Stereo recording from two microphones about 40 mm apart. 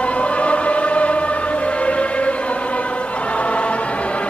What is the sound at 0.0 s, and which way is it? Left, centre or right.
Choir, left.